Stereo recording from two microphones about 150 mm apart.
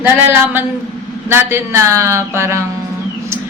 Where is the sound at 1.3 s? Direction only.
15° right (ahead or behind).